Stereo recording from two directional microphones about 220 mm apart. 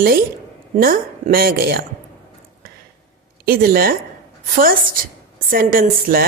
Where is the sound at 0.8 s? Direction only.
40° right (ahead or behind).